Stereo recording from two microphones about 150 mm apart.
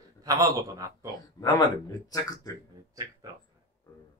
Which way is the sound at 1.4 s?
30° left (ahead or behind).